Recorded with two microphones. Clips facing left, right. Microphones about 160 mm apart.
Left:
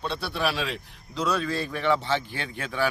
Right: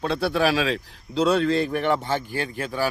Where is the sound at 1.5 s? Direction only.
55° right (ahead or behind).